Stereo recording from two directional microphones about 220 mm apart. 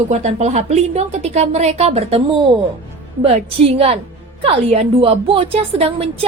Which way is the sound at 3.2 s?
25° right (ahead or behind).